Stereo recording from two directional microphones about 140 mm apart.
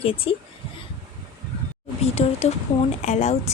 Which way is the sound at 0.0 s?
40° left (ahead or behind).